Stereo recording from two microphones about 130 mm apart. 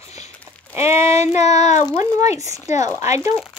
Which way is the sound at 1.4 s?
60° left (ahead or behind).